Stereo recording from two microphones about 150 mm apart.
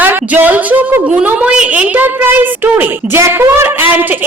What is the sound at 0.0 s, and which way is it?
A woman's voice, 10° right (ahead or behind).